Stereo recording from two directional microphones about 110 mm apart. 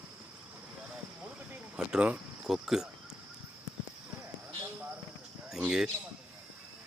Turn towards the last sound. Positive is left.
turn(degrees=-5)  # may be behind; listen again after turning